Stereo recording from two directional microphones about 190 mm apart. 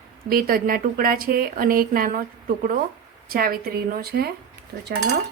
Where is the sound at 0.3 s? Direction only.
50° right (ahead or behind).